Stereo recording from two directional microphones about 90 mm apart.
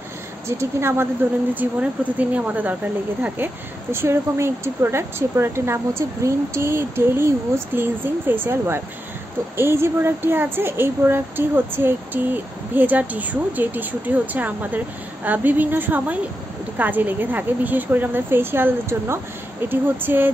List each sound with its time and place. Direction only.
0.5 s speech: 30° right (ahead or behind)
1.5 s speech: 20° right (ahead or behind)
3.9 s speech: 25° right (ahead or behind)